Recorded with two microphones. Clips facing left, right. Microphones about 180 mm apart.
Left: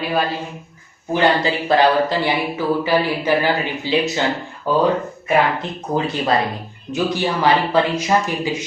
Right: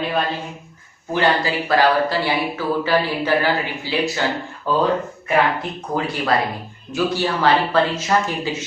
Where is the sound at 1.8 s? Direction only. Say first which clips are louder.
Left 1 dB; 20° left (ahead or behind).